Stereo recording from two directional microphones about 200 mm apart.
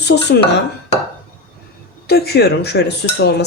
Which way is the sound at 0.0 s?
55° left (ahead or behind).